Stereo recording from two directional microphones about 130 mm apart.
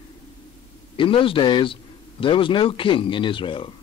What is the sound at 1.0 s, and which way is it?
A man's voice, 40° left (ahead or behind).